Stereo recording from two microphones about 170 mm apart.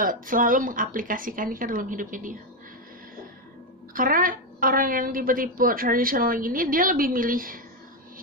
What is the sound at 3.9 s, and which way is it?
A woman's voice, 55° right (ahead or behind).